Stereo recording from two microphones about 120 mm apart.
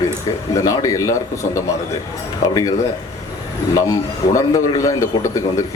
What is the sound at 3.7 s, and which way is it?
A man's voice, 30° left (ahead or behind).